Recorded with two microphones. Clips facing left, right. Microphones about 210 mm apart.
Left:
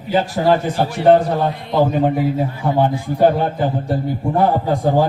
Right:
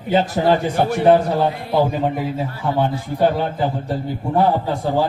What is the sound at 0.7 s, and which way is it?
Speech, 55° right (ahead or behind).